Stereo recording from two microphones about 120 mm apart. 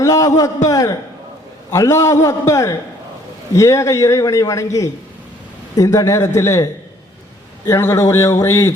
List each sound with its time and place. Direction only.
0.0 s a man's voice: 30° left (ahead or behind)